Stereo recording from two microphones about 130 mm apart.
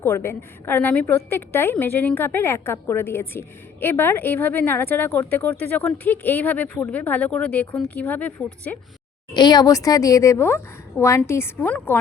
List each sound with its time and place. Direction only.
0.0 s a woman's voice: 20° left (ahead or behind)
9.3 s a woman's voice: 35° left (ahead or behind); by 11.9 s 15° left (ahead or behind)